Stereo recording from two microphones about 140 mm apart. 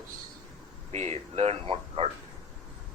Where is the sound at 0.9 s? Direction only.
50° right (ahead or behind).